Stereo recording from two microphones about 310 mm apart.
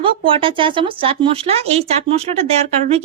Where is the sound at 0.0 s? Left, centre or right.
Centre.